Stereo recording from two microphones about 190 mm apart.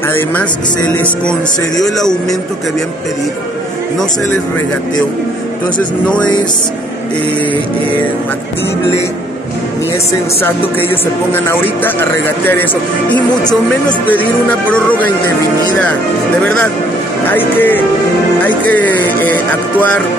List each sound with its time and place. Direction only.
0.1 s music: 10° left (ahead or behind)
1.8 s speech: centre (ahead or behind)
6.0 s music: 5° left (ahead or behind)
11.3 s music: 10° left (ahead or behind)
14.1 s music: 10° left (ahead or behind)
17.3 s music: 10° left (ahead or behind)